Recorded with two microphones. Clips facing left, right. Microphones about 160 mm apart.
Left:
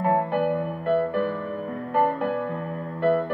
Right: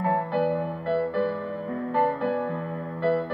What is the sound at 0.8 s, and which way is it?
Music, 50° left (ahead or behind).